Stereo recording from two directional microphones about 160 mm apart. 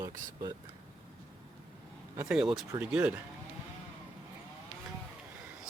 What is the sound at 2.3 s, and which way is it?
Speech, 5° right (ahead or behind).